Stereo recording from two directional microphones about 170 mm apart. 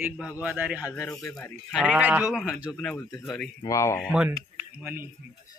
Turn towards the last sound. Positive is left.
turn(degrees=-10)  # may be behind; listen again after turning